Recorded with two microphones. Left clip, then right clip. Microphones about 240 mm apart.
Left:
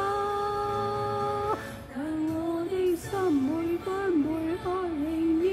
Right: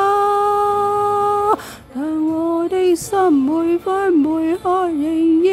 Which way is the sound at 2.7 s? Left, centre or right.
Right.